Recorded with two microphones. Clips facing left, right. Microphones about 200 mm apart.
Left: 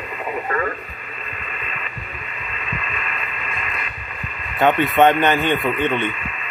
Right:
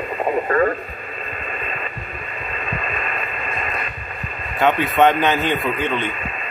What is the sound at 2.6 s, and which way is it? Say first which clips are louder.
Radio: right 3 dB; 40° right (ahead or behind).